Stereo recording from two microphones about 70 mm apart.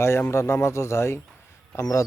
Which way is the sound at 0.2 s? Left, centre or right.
Left.